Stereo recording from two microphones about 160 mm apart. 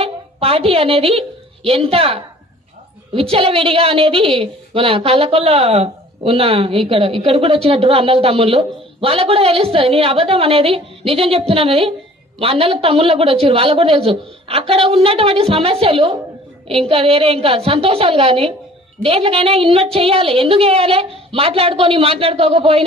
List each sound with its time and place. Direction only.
0.0 s a sound: 35° right (ahead or behind)
1.7 s a woman's voice: 35° right (ahead or behind)
3.2 s a woman's voice: 35° right (ahead or behind)